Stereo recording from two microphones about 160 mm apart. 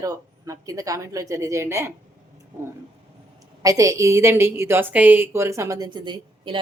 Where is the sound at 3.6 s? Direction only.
20° right (ahead or behind).